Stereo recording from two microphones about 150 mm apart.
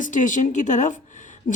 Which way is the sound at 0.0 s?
60° left (ahead or behind).